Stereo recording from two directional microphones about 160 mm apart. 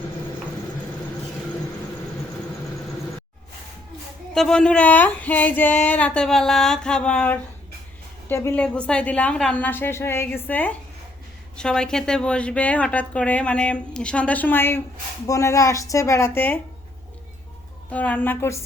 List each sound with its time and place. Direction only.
4.4 s a woman's voice: 5° left (ahead or behind)
17.9 s a woman's voice: 10° left (ahead or behind)